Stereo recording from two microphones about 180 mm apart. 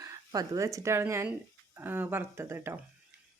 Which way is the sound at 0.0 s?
20° right (ahead or behind).